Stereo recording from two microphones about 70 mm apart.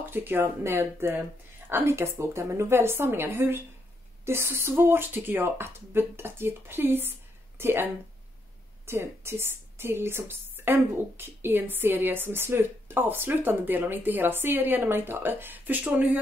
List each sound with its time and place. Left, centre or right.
0.0 s speech: right